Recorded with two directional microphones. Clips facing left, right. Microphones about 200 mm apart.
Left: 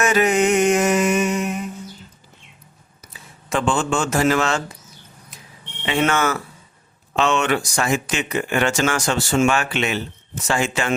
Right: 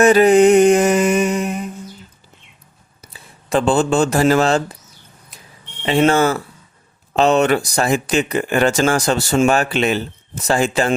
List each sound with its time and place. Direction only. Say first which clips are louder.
0.0 s mantra: right 8 dB; 35° right (ahead or behind)
3.0 s speech: right 1 dB; 35° right (ahead or behind)
5.8 s speech: right 6 dB; 35° right (ahead or behind)